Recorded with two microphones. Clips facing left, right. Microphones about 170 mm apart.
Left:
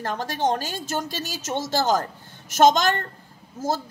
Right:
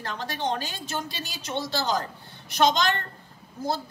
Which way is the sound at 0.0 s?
45° left (ahead or behind).